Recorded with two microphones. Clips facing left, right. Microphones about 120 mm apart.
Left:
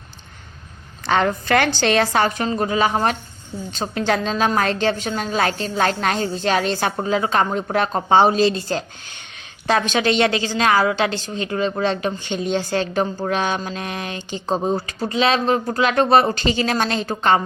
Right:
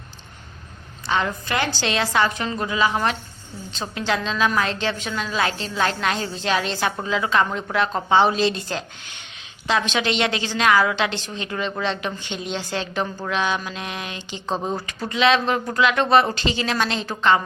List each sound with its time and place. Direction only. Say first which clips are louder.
1.0 s a woman's voice: left 5 dB; 55° left (ahead or behind)